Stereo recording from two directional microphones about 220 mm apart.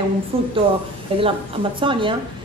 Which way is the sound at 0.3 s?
25° right (ahead or behind).